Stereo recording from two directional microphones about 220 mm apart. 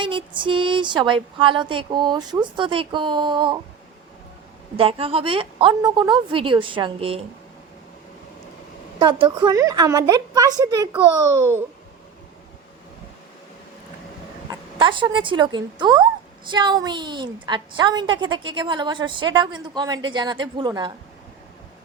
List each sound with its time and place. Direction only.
0.0 s a woman's voice: 20° right (ahead or behind)
4.8 s a woman's voice: 25° right (ahead or behind)
9.0 s a woman's voice: 20° right (ahead or behind)
14.5 s a woman's voice: 20° right (ahead or behind)